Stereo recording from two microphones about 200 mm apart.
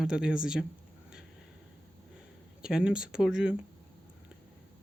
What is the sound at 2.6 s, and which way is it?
Speech, 5° right (ahead or behind).